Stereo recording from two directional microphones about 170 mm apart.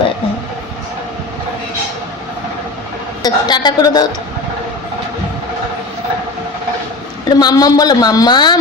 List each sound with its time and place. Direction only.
3.2 s a woman's voice: 25° left (ahead or behind)
7.3 s a woman's voice: 25° left (ahead or behind)